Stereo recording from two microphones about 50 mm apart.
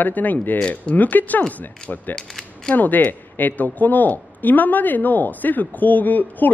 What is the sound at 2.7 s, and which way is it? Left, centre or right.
Speech, left.